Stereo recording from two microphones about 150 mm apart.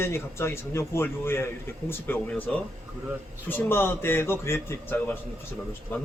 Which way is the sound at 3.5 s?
15° left (ahead or behind).